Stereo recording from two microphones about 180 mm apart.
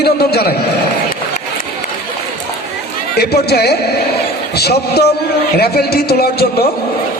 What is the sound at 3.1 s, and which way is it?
Speech, 65° left (ahead or behind).